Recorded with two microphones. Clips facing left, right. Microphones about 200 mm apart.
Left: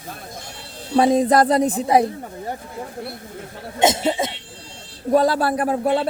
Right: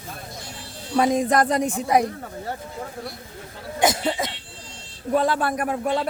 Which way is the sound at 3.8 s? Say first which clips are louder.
Left 3 dB; 25° left (ahead or behind).